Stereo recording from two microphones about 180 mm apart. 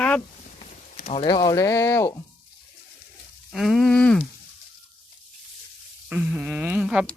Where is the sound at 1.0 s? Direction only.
35° left (ahead or behind).